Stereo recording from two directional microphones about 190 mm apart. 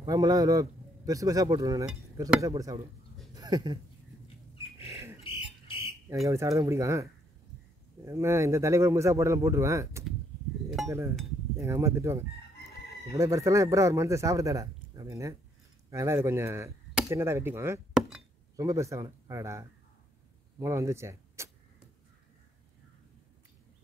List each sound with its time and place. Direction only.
0.0 s a man's voice: 20° right (ahead or behind)
5.2 s a sound: 30° left (ahead or behind)
6.2 s speech: 15° right (ahead or behind)
11.6 s speech: 15° right (ahead or behind)